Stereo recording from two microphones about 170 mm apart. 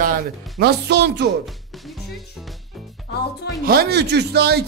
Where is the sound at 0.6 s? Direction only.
75° right (ahead or behind).